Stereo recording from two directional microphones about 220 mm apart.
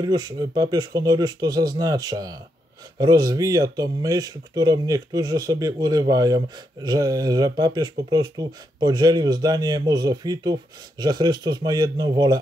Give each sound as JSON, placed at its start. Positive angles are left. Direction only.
{"t": 0.0, "sound": "speech", "side_deg": -20}